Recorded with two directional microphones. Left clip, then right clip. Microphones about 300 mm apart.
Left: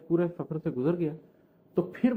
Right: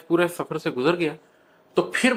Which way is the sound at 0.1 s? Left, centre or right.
Centre.